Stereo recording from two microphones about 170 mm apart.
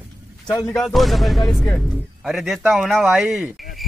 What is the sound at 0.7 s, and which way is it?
Speech, centre (ahead or behind).